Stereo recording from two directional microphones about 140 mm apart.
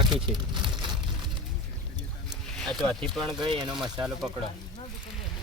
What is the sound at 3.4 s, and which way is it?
Speech, 35° right (ahead or behind).